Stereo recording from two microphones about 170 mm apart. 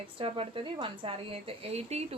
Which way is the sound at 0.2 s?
30° right (ahead or behind).